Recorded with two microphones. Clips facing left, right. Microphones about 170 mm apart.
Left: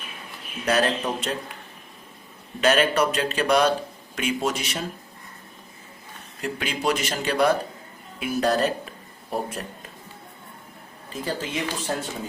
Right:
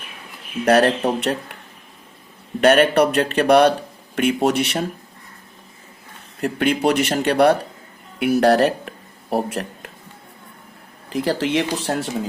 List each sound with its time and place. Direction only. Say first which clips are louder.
0.6 s a man's voice: right 7 dB; 65° right (ahead or behind)
2.6 s a man's voice: right 6 dB; 60° right (ahead or behind)
6.4 s a man's voice: right 8 dB; 60° right (ahead or behind)
11.1 s speech: right 9 dB; 80° right